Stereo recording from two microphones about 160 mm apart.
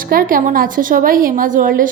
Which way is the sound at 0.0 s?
60° right (ahead or behind).